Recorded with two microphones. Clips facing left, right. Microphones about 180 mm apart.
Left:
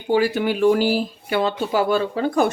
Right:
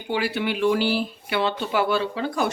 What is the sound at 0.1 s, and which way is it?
Speech, 45° left (ahead or behind).